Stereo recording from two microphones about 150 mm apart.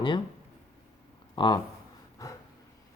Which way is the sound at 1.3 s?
30° left (ahead or behind).